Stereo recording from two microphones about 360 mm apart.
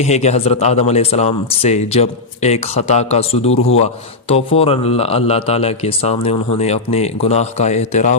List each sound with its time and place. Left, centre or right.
0.0 s a man's voice: centre